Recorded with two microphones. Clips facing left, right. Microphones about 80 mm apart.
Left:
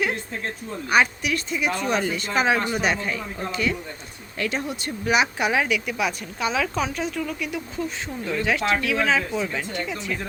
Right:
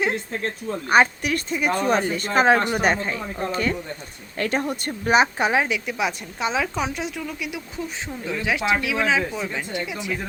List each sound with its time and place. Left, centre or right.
0.9 s speech: right; by 10.2 s centre